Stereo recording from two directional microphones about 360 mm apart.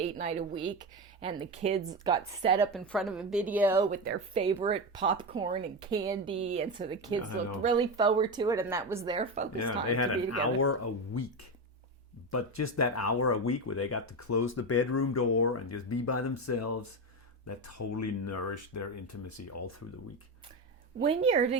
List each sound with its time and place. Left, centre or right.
0.0 s speech: centre
2.7 s a woman's voice: centre
3.8 s speech: right
9.6 s speech: left
12.3 s speech: left
21.2 s speech: centre